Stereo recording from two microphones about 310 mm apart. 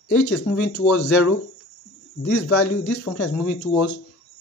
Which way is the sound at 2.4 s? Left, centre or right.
Left.